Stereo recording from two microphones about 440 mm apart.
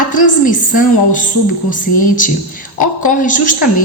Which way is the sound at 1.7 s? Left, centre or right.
Centre.